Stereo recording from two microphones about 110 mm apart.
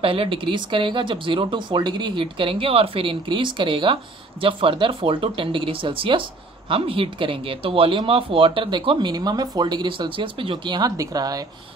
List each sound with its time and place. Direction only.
0.0 s speech: 55° right (ahead or behind); by 11.4 s 35° right (ahead or behind)